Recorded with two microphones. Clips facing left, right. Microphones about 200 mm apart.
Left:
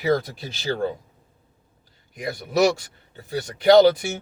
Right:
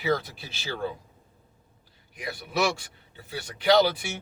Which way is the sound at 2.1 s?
40° left (ahead or behind).